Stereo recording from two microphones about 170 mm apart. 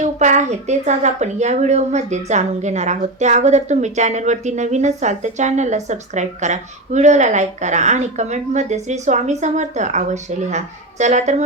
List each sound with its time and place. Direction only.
0.0 s a woman's voice: 45° right (ahead or behind)